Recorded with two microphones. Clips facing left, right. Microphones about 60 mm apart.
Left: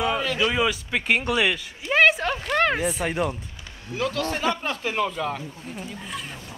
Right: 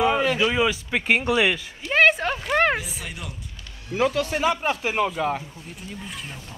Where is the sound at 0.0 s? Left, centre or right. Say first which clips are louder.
Right 3 dB; centre.